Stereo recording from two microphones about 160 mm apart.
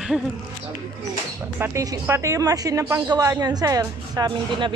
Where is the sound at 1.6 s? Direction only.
20° right (ahead or behind).